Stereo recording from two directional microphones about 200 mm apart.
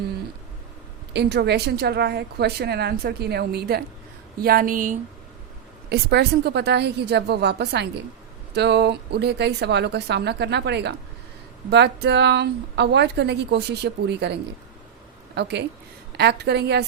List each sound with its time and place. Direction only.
1.1 s a woman's voice: 55° right (ahead or behind)
5.9 s a woman's voice: 55° right (ahead or behind)
15.4 s a woman's voice: 55° right (ahead or behind)